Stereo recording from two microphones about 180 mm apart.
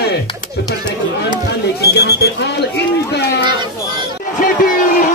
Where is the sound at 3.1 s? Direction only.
70° left (ahead or behind).